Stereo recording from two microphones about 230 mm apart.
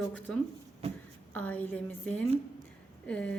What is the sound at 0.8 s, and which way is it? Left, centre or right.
Speech, right.